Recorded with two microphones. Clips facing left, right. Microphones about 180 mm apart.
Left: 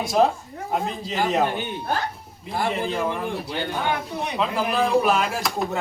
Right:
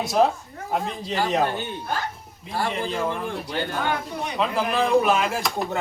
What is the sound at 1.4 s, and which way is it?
Speech, 15° left (ahead or behind).